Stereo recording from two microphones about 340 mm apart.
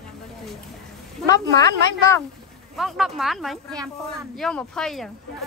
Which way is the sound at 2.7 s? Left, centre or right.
Centre.